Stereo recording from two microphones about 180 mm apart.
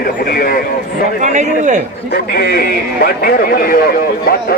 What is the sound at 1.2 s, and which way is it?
Speech, 40° right (ahead or behind).